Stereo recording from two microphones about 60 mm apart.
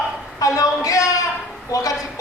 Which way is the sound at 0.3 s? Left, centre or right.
Left.